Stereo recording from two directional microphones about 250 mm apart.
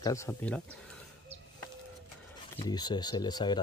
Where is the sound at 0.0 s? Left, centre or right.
Centre.